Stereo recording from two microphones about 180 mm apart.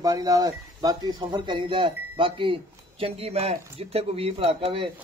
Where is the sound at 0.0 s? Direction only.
20° right (ahead or behind).